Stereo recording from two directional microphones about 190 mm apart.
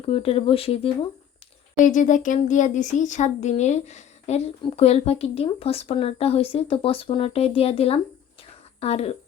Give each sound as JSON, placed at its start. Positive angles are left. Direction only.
{"t": 0.1, "sound": "speech", "side_deg": 30}
{"t": 1.8, "sound": "speech", "side_deg": 40}